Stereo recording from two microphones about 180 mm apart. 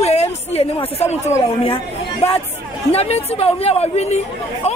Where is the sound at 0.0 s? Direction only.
35° left (ahead or behind).